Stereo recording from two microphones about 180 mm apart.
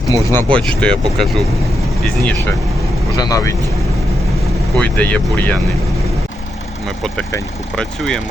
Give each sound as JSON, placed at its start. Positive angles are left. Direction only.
{"t": 0.1, "sound": "speech", "side_deg": 15}
{"t": 0.8, "sound": "speech", "side_deg": 5}
{"t": 3.2, "sound": "speech", "side_deg": 20}
{"t": 4.8, "sound": "speech", "side_deg": 10}
{"t": 7.8, "sound": "speech", "side_deg": 5}